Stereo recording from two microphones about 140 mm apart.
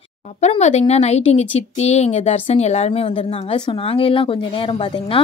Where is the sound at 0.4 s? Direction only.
55° left (ahead or behind).